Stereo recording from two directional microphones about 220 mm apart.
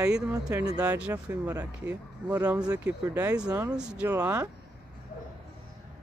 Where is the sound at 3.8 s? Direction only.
5° right (ahead or behind).